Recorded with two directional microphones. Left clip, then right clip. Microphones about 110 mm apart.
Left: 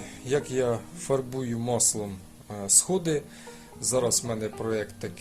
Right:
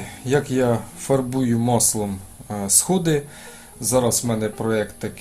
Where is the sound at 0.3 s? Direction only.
40° left (ahead or behind).